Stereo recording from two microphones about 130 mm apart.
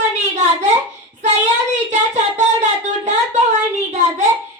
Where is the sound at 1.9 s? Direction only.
60° right (ahead or behind).